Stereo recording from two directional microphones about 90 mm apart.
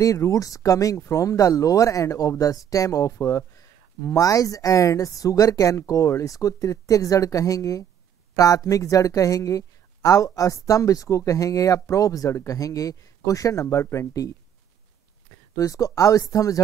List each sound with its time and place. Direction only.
0.0 s a woman's voice: 40° left (ahead or behind)
15.5 s a woman's voice: 40° left (ahead or behind)